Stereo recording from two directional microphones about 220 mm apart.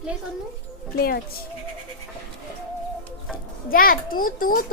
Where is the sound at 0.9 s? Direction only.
45° left (ahead or behind).